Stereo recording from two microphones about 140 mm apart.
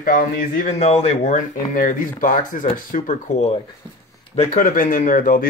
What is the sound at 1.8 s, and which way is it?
Speech, 70° left (ahead or behind).